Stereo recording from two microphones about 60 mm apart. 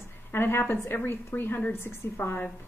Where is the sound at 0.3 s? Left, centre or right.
Left.